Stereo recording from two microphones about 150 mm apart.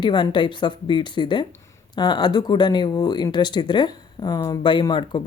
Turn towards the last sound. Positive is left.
turn(degrees=30)  # may be behind; listen again after turning